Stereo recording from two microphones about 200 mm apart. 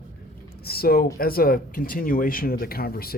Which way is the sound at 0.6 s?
50° left (ahead or behind).